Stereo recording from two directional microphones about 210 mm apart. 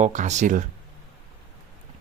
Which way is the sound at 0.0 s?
35° right (ahead or behind).